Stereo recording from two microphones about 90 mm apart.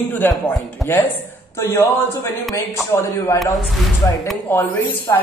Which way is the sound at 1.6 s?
35° left (ahead or behind).